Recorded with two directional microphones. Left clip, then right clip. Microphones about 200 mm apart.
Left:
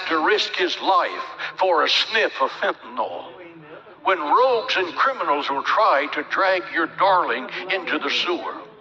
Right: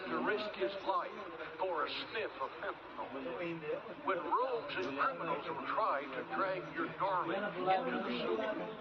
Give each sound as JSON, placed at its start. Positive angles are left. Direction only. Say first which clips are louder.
{"t": 0.0, "sound": "a man's voice", "louder": "left 17 dB", "side_deg": 50}
{"t": 4.0, "sound": "a man's voice", "louder": "left 18 dB", "side_deg": 50}